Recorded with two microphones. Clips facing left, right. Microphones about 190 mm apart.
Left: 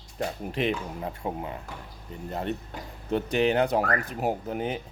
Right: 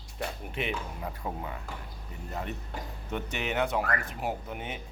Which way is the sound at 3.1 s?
35° left (ahead or behind).